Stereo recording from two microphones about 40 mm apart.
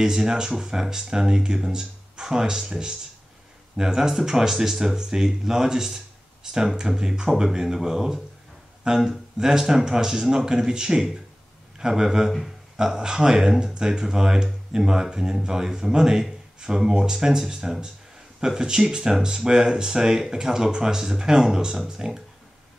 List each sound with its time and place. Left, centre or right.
0.0 s speech: centre
12.3 s speech: centre
12.7 s speech: centre